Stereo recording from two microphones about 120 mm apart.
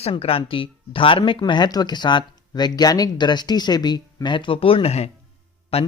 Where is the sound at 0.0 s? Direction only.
55° left (ahead or behind).